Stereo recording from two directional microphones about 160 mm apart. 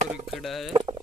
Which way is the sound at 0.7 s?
30° right (ahead or behind).